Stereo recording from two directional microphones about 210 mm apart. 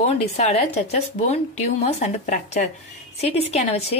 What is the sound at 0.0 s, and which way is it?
Speech, 30° left (ahead or behind).